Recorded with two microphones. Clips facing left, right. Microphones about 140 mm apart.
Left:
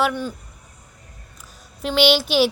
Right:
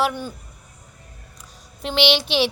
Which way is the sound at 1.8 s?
Centre (ahead or behind).